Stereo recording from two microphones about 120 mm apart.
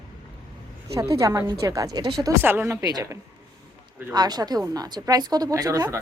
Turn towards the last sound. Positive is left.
turn(degrees=-30)  # may be behind; listen again after turning